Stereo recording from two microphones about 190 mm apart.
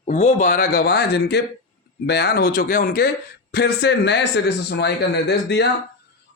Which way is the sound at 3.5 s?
60° left (ahead or behind).